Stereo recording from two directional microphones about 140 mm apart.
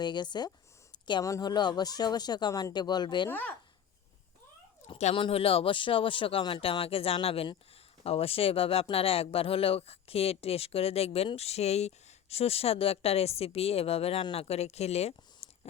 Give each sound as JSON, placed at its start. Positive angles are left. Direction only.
{"t": 0.0, "sound": "speech", "side_deg": 30}
{"t": 3.2, "sound": "speech", "side_deg": 15}
{"t": 4.9, "sound": "speech", "side_deg": 55}
{"t": 5.2, "sound": "speech", "side_deg": 40}
{"t": 15.4, "sound": "a sound", "side_deg": 45}